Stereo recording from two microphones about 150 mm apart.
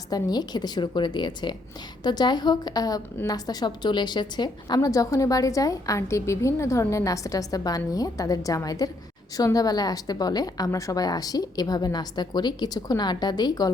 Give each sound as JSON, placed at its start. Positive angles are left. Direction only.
{"t": 0.1, "sound": "a woman's voice", "side_deg": 25}